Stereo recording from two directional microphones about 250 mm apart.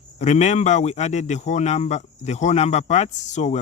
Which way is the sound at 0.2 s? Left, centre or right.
Left.